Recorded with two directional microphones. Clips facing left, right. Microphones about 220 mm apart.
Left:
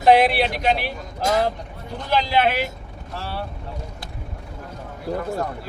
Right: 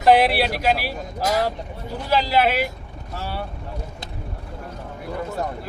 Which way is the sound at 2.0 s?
5° right (ahead or behind).